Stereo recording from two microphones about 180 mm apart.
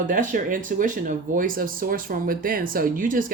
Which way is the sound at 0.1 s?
45° right (ahead or behind).